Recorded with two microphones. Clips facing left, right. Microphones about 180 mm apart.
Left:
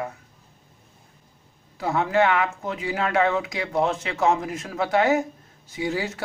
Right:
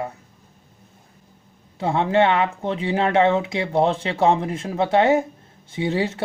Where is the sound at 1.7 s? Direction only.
25° right (ahead or behind).